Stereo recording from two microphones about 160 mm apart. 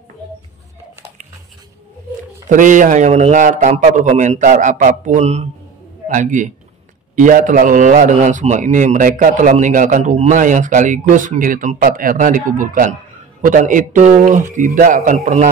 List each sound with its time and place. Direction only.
2.5 s a man's voice: 55° right (ahead or behind)
15.1 s a man's voice: 45° right (ahead or behind)